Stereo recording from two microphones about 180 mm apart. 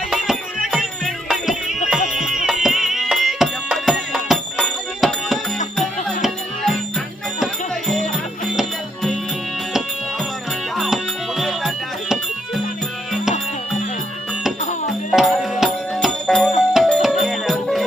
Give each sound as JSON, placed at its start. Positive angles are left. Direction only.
{"t": 0.1, "sound": "music", "side_deg": 0}
{"t": 10.8, "sound": "music", "side_deg": 0}
{"t": 15.1, "sound": "music", "side_deg": 0}